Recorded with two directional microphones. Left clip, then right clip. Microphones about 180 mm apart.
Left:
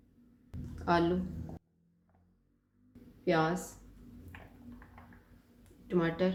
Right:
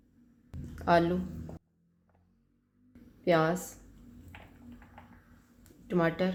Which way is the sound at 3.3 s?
45° right (ahead or behind).